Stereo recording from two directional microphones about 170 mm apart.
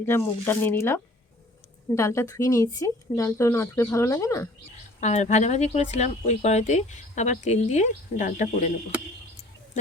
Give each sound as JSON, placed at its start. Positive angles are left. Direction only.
{"t": 0.0, "sound": "speech", "side_deg": 15}
{"t": 2.0, "sound": "speech", "side_deg": 15}
{"t": 4.9, "sound": "speech", "side_deg": 45}